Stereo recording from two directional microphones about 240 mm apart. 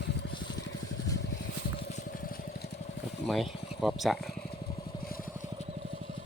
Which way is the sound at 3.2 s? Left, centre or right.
Centre.